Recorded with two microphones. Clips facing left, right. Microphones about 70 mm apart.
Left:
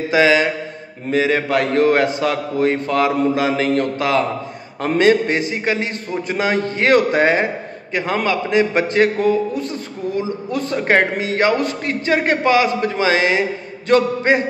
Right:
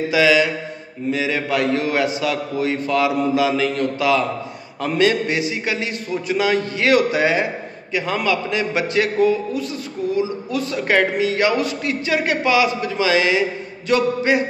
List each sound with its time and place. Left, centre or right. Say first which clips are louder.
0.1 s a man's voice: left 2 dB; left